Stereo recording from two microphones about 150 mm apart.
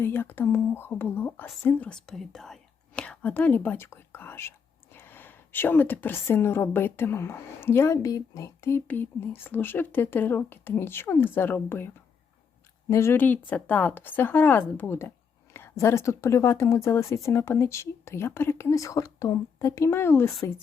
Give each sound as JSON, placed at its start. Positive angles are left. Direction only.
{"t": 0.0, "sound": "a woman's voice", "side_deg": 15}
{"t": 12.9, "sound": "a woman's voice", "side_deg": 15}